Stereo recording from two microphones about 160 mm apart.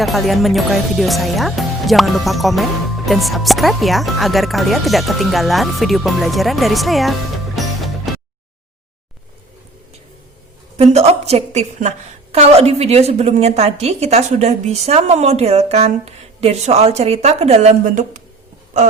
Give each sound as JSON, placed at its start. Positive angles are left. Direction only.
{"t": 0.0, "sound": "speech", "side_deg": 0}
{"t": 10.8, "sound": "a woman's voice", "side_deg": -45}